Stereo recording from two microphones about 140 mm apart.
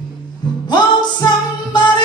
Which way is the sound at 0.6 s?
30° left (ahead or behind).